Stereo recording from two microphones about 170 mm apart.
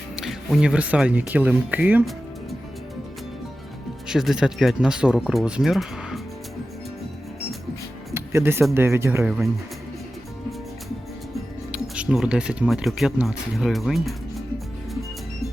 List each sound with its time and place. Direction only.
0.2 s speech: centre (ahead or behind)
4.1 s speech: 5° right (ahead or behind)
8.1 s music: 15° right (ahead or behind)
8.7 s speech: 15° right (ahead or behind)
11.7 s speech: 5° right (ahead or behind)